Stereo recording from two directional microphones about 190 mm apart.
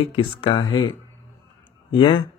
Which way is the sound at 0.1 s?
25° left (ahead or behind).